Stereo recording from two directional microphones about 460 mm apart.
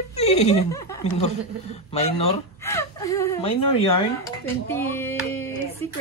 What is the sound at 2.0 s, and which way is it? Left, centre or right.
Speech, centre.